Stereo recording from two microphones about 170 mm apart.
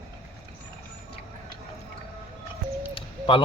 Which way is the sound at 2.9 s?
30° left (ahead or behind).